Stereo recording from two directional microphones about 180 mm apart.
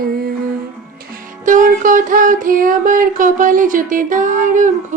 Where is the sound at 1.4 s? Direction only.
45° right (ahead or behind).